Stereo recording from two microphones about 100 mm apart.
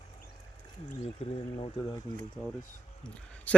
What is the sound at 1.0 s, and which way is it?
Speech, 80° left.